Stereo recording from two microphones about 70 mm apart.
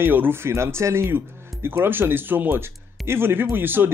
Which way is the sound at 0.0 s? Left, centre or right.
Right.